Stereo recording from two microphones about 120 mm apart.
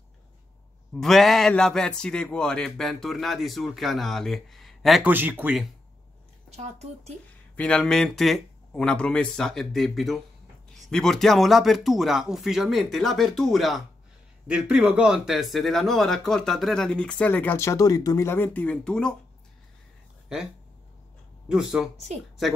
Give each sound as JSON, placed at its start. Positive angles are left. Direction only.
{"t": 0.9, "sound": "speech", "side_deg": 5}
{"t": 5.0, "sound": "speech", "side_deg": -15}
{"t": 6.5, "sound": "speech", "side_deg": -65}
{"t": 7.5, "sound": "speech", "side_deg": 10}
{"t": 20.3, "sound": "speech", "side_deg": -5}
{"t": 21.9, "sound": "speech", "side_deg": -65}